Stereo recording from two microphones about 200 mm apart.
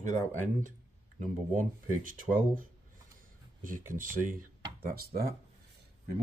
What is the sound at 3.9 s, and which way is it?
Speech, 40° right (ahead or behind).